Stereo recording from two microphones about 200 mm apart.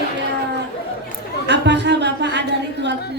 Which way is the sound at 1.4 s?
60° right (ahead or behind).